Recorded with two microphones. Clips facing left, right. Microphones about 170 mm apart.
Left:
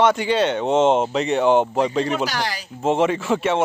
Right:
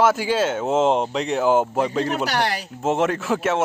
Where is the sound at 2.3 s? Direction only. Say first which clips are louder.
Right 3 dB; 60° right (ahead or behind).